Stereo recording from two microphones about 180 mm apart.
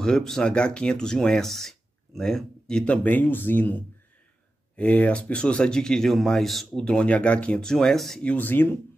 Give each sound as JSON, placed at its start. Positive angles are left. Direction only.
{"t": 0.0, "sound": "speech", "side_deg": 5}